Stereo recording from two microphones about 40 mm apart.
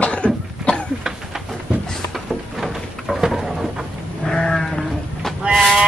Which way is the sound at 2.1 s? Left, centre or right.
Centre.